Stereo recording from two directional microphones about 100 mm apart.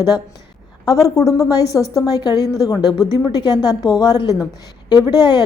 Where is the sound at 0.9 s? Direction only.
35° left (ahead or behind).